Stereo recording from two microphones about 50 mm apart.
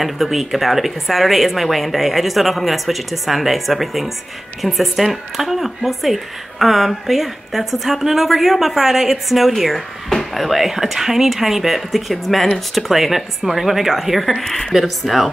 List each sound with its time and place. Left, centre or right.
0.0 s a woman's voice: centre